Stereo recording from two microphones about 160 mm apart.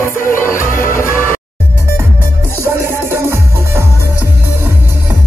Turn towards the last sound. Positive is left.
turn(degrees=-15)  # may be behind; listen again after turning